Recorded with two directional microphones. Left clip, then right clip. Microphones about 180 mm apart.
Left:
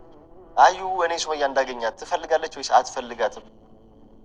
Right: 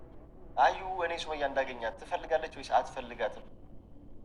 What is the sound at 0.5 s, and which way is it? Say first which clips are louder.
A man's voice: left 10 dB; 30° left (ahead or behind).